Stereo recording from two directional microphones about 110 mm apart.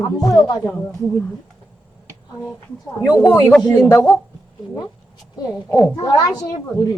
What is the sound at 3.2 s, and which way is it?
Speech, 20° left (ahead or behind).